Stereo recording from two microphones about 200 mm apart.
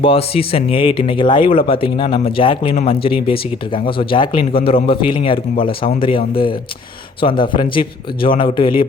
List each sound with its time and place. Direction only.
0.0 s a man's voice: 30° left (ahead or behind)